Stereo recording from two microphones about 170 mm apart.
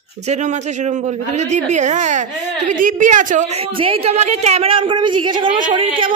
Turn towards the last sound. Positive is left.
turn(degrees=-30)  # may be behind; listen again after turning